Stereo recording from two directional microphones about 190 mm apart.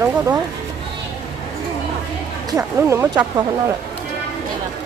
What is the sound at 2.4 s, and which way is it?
Speech, 15° right (ahead or behind).